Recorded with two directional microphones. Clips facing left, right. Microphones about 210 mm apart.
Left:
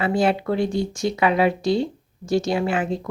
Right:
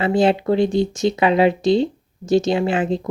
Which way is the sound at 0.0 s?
25° right (ahead or behind).